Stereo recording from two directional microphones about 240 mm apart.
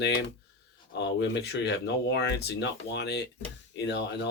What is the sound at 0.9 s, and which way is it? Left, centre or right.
Speech, left.